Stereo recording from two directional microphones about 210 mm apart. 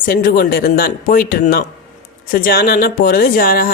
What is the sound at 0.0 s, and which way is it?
Speech, 45° left (ahead or behind).